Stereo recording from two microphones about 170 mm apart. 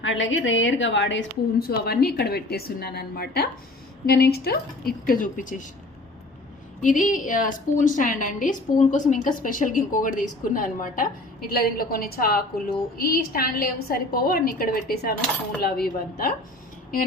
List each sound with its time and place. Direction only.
0.0 s a woman's voice: 90° left; by 5.6 s 50° left (ahead or behind)
6.8 s a woman's voice: 50° left (ahead or behind)